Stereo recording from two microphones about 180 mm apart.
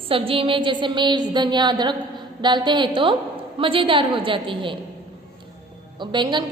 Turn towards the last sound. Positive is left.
turn(degrees=-25)  # may be behind; listen again after turning